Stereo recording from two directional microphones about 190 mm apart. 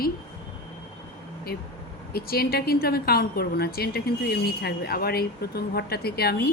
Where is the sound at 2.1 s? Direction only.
55° left (ahead or behind).